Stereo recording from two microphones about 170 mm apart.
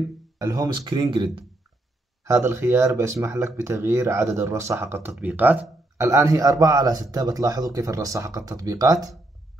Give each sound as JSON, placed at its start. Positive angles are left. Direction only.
{"t": 0.4, "sound": "speech", "side_deg": -20}
{"t": 2.2, "sound": "speech", "side_deg": -15}